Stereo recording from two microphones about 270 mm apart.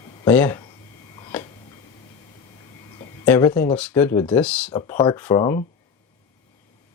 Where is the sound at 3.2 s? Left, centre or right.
Centre.